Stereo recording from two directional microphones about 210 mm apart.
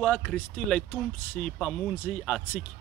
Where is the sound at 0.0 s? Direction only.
5° left (ahead or behind).